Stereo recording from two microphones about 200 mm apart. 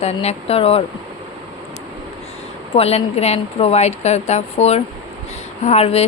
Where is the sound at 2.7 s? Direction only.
30° left (ahead or behind).